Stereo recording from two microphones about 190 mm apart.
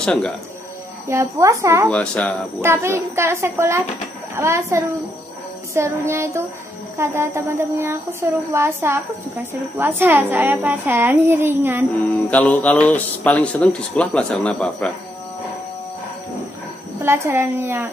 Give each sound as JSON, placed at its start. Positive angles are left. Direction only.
{"t": 0.0, "sound": "speech", "side_deg": 5}
{"t": 1.0, "sound": "speech", "side_deg": -15}
{"t": 1.9, "sound": "speech", "side_deg": 5}
{"t": 2.6, "sound": "speech", "side_deg": -15}
{"t": 12.3, "sound": "a man's voice", "side_deg": 10}
{"t": 17.0, "sound": "speech", "side_deg": -10}